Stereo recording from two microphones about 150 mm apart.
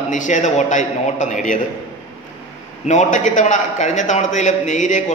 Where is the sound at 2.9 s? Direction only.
55° left (ahead or behind).